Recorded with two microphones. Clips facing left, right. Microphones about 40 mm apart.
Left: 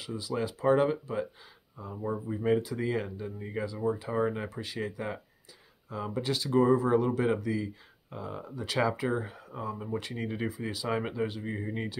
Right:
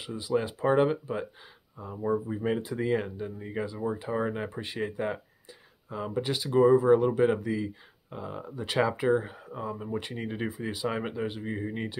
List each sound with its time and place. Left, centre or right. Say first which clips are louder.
0.0 s speech: right 4 dB; right
4.5 s speech: right 2 dB; right
5.9 s speech: right 1 dB; centre
10.9 s speech: left 2 dB; centre